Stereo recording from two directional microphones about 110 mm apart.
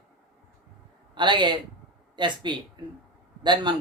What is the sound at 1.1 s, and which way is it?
A man's voice, 45° right (ahead or behind).